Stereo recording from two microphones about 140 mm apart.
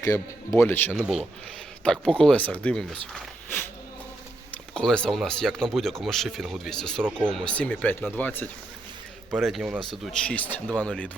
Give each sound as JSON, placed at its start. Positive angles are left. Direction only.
{"t": 0.0, "sound": "speech", "side_deg": 20}
{"t": 4.5, "sound": "speech", "side_deg": 5}
{"t": 9.3, "sound": "speech", "side_deg": 0}